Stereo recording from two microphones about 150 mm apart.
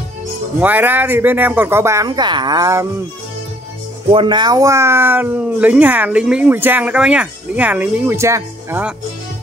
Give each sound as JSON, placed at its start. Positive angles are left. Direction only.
{"t": 0.6, "sound": "speech", "side_deg": -10}
{"t": 4.1, "sound": "speech", "side_deg": -30}